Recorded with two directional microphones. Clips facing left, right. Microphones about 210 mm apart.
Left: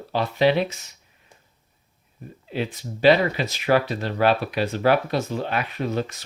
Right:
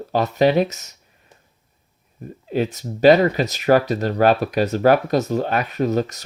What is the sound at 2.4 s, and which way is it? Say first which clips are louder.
Speech: right 6 dB; 45° right (ahead or behind).